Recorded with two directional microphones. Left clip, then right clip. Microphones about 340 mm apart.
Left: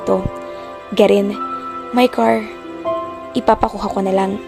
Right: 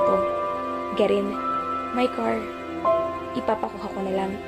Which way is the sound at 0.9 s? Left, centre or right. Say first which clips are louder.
Left 10 dB; left.